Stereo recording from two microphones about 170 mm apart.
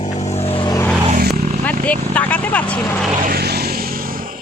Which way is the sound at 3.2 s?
65° right (ahead or behind).